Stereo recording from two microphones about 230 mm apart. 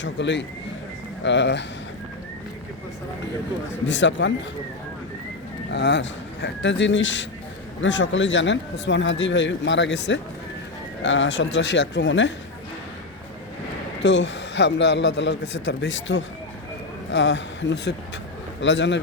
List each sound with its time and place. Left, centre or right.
0.0 s speech: left
3.8 s speech: left
5.7 s speech: left
14.0 s speech: left